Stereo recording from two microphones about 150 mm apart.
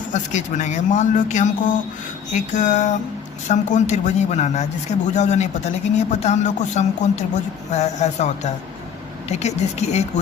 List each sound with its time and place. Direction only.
0.1 s speech: 55° left (ahead or behind)
9.3 s speech: 45° left (ahead or behind)